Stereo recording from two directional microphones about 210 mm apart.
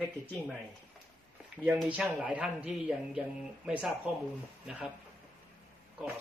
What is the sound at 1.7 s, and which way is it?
Speech, 5° right (ahead or behind).